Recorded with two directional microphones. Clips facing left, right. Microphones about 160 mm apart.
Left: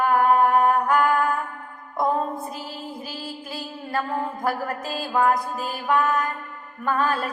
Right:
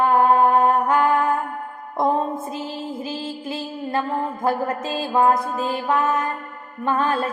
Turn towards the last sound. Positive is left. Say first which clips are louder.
# right 2 dB
turn(degrees=-25)  # may be behind; listen again after turning